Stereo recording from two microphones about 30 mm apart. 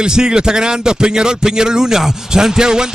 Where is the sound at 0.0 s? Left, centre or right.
Right.